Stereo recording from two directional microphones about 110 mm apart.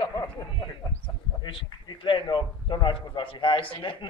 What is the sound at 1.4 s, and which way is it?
A man's voice, 45° left (ahead or behind).